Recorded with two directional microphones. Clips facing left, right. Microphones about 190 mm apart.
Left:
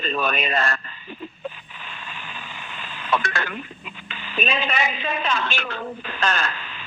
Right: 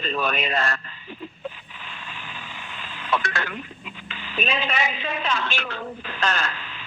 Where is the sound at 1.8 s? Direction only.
55° left (ahead or behind).